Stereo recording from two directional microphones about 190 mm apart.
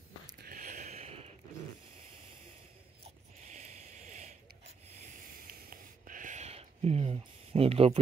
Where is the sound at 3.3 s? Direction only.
40° right (ahead or behind).